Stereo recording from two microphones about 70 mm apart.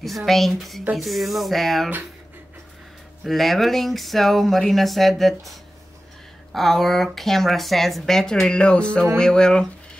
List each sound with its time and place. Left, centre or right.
0.0 s speech: centre
3.3 s speech: centre